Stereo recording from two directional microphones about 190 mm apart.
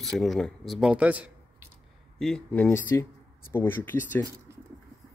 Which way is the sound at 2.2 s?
5° left (ahead or behind).